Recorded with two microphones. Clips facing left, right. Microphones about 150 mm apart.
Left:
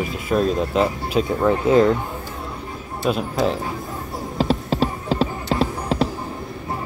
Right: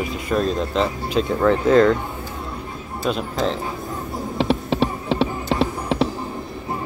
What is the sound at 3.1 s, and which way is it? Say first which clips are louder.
Speech: left 2 dB; 5° left (ahead or behind).